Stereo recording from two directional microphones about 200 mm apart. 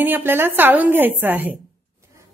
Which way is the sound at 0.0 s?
10° right (ahead or behind).